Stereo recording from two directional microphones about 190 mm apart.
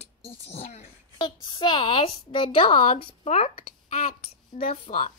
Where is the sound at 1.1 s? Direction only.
25° left (ahead or behind).